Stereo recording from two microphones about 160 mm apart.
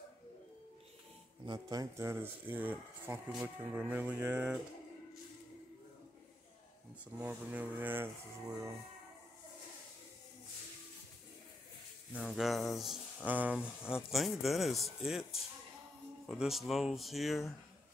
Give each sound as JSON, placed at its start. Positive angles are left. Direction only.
{"t": 1.4, "sound": "speech", "side_deg": -25}
{"t": 7.2, "sound": "speech", "side_deg": -10}
{"t": 12.1, "sound": "speech", "side_deg": -5}